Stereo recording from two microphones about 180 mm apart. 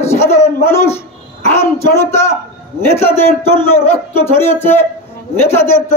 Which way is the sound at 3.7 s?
35° left (ahead or behind).